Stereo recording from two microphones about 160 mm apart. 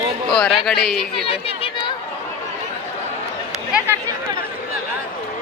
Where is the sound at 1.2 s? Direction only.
35° left (ahead or behind).